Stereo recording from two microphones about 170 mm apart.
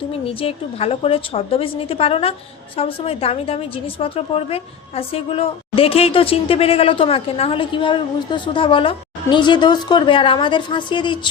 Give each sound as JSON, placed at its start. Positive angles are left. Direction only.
{"t": 0.3, "sound": "a woman's voice", "side_deg": 35}